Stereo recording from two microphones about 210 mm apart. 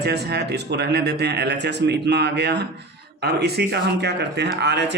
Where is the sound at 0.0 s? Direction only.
50° right (ahead or behind).